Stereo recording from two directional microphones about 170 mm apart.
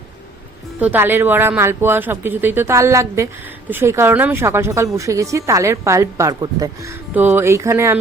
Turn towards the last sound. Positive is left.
turn(degrees=-15)  # may be behind; listen again after turning